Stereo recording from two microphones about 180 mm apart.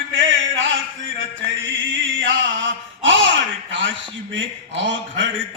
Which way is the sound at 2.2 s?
90° right.